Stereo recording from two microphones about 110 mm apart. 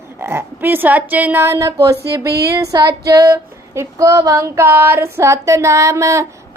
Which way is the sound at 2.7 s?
40° right (ahead or behind).